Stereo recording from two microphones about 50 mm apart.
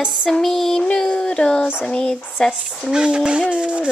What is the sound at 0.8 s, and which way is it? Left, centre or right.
Speech, centre.